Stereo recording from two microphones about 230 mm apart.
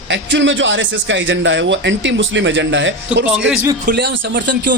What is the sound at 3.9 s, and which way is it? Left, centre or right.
Speech, right.